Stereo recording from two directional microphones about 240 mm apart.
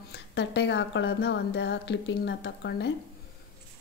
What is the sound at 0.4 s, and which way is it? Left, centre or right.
A woman's voice, left.